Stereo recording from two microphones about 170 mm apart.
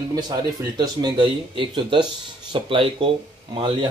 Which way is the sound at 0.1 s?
20° right (ahead or behind).